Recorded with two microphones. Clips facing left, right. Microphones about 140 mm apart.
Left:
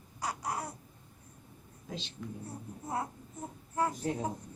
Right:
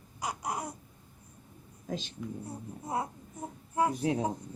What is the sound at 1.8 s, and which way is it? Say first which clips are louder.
Speech: right 5 dB; 45° right (ahead or behind).